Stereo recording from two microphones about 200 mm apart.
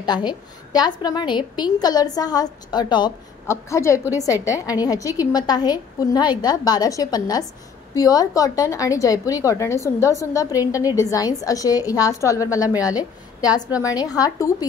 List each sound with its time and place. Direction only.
0.0 s a woman's voice: 20° left (ahead or behind)